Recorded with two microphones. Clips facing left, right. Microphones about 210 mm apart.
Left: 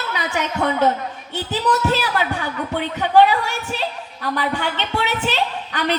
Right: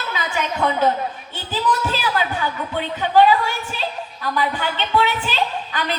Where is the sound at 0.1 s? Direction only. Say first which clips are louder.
Even; 70° left (ahead or behind).